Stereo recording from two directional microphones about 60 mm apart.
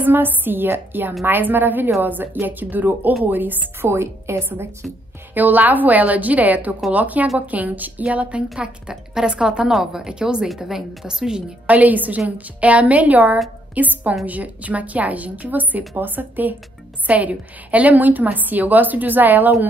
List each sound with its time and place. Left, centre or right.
0.0 s a woman's voice: right
3.9 s a woman's voice: right
5.3 s a woman's voice: right; by 11.4 s centre
11.6 s a woman's voice: right